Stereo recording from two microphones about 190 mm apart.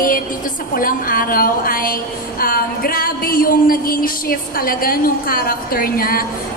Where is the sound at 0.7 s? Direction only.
50° left (ahead or behind).